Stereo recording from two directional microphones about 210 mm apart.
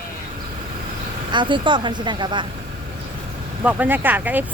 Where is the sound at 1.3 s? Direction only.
20° right (ahead or behind).